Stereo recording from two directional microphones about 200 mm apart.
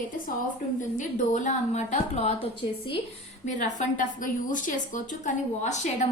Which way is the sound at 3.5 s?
35° left (ahead or behind).